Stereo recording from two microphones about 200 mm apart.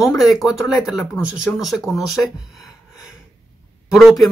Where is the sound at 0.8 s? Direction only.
Centre (ahead or behind).